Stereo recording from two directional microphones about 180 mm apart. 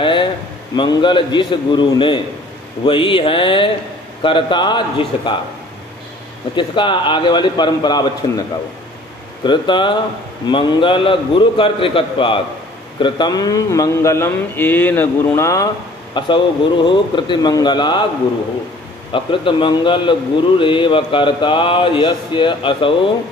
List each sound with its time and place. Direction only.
0.0 s a sound: 25° left (ahead or behind)
0.7 s a man's voice: 25° left (ahead or behind)
6.5 s a man's voice: 25° left (ahead or behind)
19.1 s a man's voice: 30° left (ahead or behind)